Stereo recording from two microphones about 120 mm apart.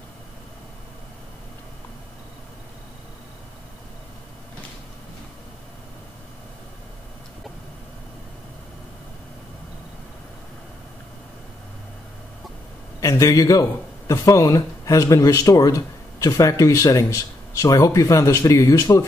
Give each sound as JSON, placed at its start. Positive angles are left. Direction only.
{"t": 13.0, "sound": "speech", "side_deg": 25}